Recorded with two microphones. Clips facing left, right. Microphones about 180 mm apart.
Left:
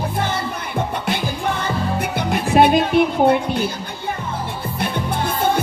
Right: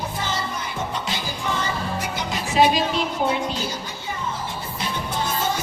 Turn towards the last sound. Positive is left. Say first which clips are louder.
# left 5 dB
turn(degrees=60)  # may be behind; listen again after turning